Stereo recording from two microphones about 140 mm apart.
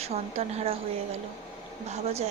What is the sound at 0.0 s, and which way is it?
Speech, 45° right (ahead or behind).